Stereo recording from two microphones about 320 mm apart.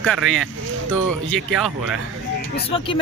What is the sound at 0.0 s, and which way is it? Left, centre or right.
Speech, centre.